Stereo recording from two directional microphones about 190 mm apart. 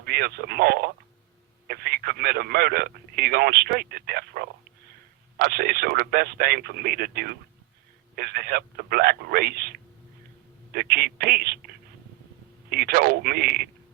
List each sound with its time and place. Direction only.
0.0 s speech: 55° right (ahead or behind)
12.7 s speech: 55° right (ahead or behind)